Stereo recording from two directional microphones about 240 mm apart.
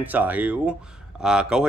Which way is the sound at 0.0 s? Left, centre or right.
Centre.